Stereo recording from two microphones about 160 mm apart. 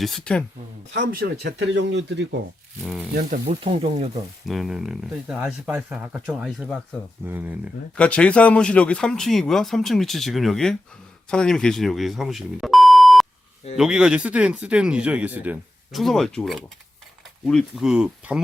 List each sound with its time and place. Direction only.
0.0 s speech: 5° left (ahead or behind)
0.9 s speech: 70° right (ahead or behind); by 2.2 s 90° right
2.8 s speech: 5° right (ahead or behind)
3.2 s speech: 50° right (ahead or behind)
3.6 s speech: 40° right (ahead or behind)
4.4 s speech: centre (ahead or behind)
7.9 s speech: 5° left (ahead or behind); by 16.0 s 10° right (ahead or behind)
16.0 s speech: centre (ahead or behind)